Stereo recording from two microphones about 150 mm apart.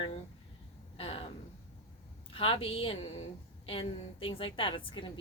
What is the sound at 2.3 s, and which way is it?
A woman's voice, 35° left (ahead or behind).